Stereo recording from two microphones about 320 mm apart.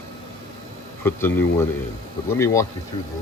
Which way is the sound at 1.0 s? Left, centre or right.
Centre.